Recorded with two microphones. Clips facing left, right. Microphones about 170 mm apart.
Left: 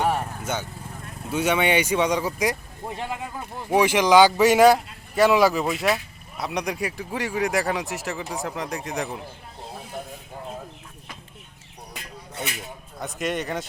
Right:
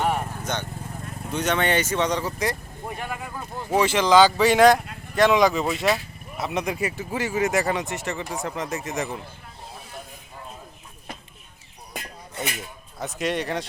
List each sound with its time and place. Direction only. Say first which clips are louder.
0.0 s lawn mower: left 1 dB; 10° left (ahead or behind)
1.3 s speech: left 2 dB; 10° left (ahead or behind)
2.9 s speech: left 2 dB; 25° left (ahead or behind)
3.7 s speech: left 1 dB; 10° left (ahead or behind)
11.9 s a sound: right 2 dB; 50° right (ahead or behind)
13.0 s speech: right 1 dB; centre (ahead or behind)